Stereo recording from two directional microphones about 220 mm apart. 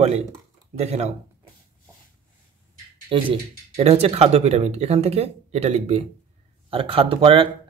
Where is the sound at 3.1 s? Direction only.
25° right (ahead or behind).